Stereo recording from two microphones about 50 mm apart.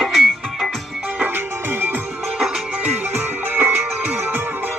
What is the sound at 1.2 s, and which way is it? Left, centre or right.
Music, right.